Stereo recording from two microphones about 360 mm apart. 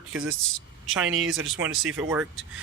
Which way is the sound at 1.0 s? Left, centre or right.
Right.